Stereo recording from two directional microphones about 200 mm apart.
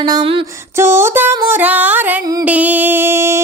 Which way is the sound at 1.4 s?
10° right (ahead or behind).